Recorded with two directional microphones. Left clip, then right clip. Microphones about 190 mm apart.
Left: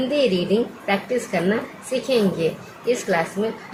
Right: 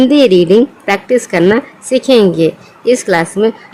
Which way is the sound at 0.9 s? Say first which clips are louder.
Right 10 dB; 60° right (ahead or behind).